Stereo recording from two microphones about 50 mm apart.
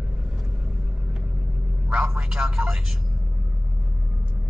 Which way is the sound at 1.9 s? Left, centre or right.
Centre.